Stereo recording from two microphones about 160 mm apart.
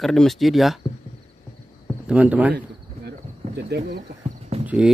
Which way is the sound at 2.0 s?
10° right (ahead or behind).